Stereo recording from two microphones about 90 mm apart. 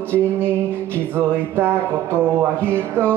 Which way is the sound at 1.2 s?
25° right (ahead or behind).